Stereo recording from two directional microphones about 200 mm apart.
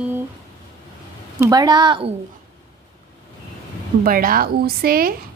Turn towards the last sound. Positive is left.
turn(degrees=-50)  # may be behind; listen again after turning